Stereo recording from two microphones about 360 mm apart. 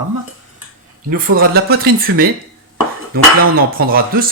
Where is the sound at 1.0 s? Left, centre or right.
Right.